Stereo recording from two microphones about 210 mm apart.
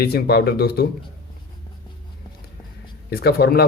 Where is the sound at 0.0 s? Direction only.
50° left (ahead or behind).